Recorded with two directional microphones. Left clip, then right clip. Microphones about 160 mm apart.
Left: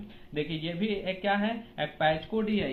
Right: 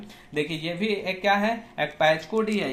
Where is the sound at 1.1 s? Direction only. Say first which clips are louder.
Right 7 dB; 25° right (ahead or behind).